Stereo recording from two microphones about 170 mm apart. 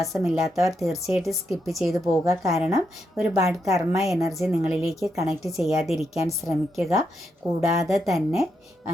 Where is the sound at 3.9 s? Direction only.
Centre (ahead or behind).